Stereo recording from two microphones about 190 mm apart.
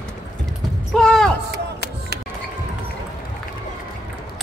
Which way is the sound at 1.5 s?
60° right (ahead or behind).